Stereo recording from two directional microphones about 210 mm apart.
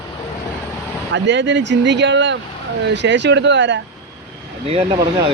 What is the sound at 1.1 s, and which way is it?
Speech, 60° right (ahead or behind).